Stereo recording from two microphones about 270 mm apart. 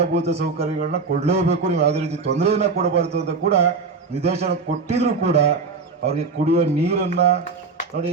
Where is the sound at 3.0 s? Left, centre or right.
Right.